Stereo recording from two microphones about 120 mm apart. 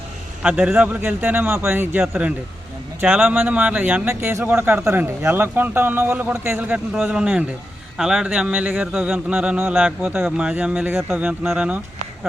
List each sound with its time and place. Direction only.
0.4 s speech: 5° right (ahead or behind)